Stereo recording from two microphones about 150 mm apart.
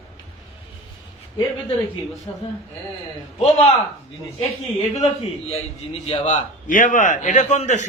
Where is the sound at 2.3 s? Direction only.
30° left (ahead or behind).